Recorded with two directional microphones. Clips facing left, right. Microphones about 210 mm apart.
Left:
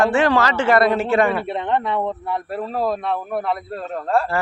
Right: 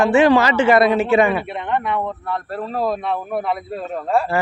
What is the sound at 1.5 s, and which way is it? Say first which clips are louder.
Speech: left 1 dB; 30° left (ahead or behind).